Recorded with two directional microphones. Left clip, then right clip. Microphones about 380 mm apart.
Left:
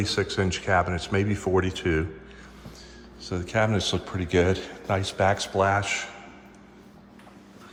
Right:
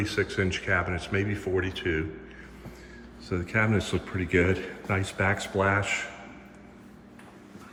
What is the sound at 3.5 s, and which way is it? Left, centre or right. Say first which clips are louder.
Speech: left 3 dB; centre.